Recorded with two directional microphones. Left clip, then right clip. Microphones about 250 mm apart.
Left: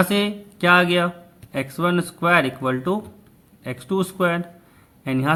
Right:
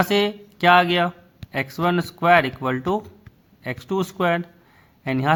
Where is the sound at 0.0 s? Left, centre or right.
Right.